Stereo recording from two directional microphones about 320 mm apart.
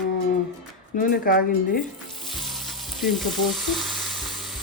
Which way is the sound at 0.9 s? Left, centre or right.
Left.